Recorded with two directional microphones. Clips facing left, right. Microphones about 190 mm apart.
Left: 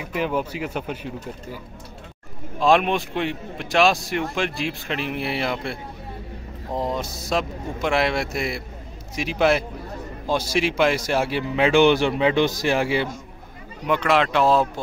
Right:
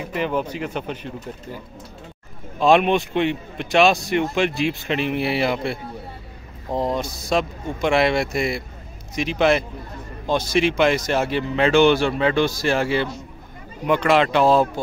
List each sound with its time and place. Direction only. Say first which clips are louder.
0.0 s speech: right 1 dB; 5° left (ahead or behind)
2.6 s a man's voice: right 3 dB; centre (ahead or behind)
13.8 s a man's voice: right 3 dB; centre (ahead or behind)